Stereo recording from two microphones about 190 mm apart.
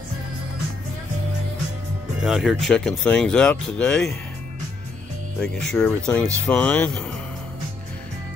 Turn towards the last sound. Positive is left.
turn(degrees=5)  # may be behind; listen again after turning